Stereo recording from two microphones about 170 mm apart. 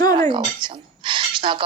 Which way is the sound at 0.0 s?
20° left (ahead or behind).